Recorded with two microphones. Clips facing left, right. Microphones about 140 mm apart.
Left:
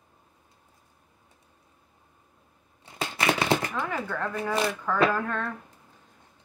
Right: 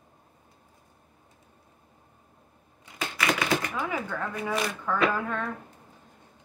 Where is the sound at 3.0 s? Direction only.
30° left (ahead or behind).